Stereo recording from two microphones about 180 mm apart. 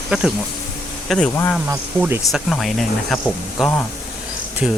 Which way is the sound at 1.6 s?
15° right (ahead or behind).